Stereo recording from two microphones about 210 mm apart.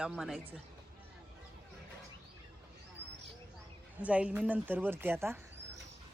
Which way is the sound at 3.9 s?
5° right (ahead or behind).